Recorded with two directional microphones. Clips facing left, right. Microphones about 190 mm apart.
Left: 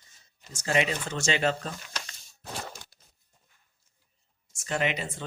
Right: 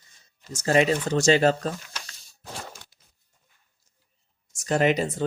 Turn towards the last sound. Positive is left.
turn(degrees=-40)  # may be behind; listen again after turning